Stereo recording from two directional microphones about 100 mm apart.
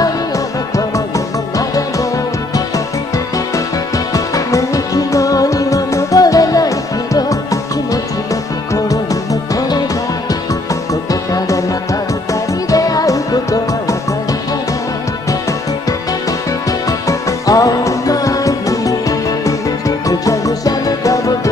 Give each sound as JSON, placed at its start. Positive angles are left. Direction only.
{"t": 0.7, "sound": "music", "side_deg": 35}
{"t": 4.1, "sound": "music", "side_deg": 35}
{"t": 8.7, "sound": "music", "side_deg": 35}
{"t": 11.1, "sound": "music", "side_deg": 35}
{"t": 17.1, "sound": "music", "side_deg": 35}